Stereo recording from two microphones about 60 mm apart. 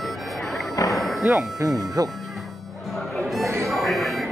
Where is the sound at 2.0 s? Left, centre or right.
Right.